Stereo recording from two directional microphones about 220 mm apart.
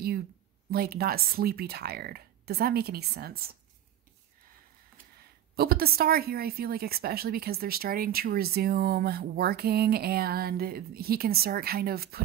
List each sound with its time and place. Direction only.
0.7 s a woman's voice: 45° right (ahead or behind)
5.6 s a woman's voice: 45° right (ahead or behind)